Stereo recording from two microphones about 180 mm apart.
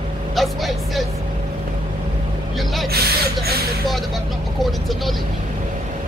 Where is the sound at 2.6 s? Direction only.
Centre (ahead or behind).